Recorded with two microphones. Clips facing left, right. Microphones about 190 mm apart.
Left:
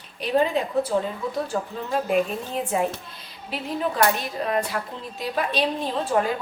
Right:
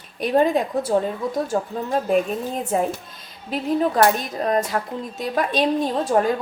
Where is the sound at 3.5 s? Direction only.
45° right (ahead or behind).